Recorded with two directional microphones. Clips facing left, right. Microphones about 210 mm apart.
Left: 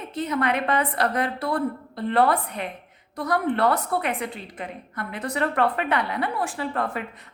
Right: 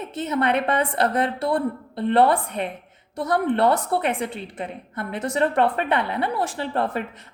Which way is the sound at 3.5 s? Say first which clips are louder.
Right 3 dB; 30° right (ahead or behind).